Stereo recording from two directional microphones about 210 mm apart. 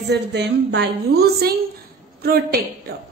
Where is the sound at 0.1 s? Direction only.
55° right (ahead or behind).